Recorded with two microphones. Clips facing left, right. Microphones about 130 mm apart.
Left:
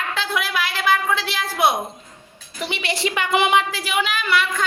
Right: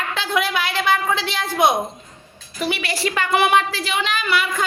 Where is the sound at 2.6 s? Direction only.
20° left (ahead or behind); by 4.7 s centre (ahead or behind).